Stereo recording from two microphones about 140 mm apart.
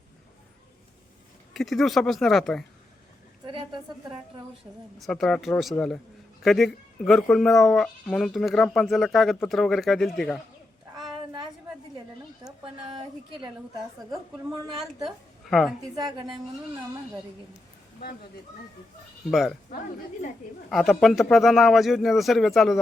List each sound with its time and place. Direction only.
1.5 s speech: centre (ahead or behind)
3.4 s a sound: 35° right (ahead or behind)
4.9 s speech: centre (ahead or behind)
12.6 s a woman's voice: 35° right (ahead or behind)
15.0 s a woman's voice: centre (ahead or behind)
16.0 s a woman's voice: 30° right (ahead or behind)
19.3 s speech: centre (ahead or behind)
20.7 s speech: centre (ahead or behind)